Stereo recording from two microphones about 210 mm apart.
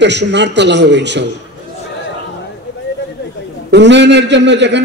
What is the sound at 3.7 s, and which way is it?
A man's voice, 55° right (ahead or behind).